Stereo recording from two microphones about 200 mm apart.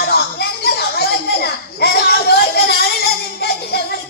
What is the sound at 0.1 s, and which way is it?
Children playing, 55° left (ahead or behind).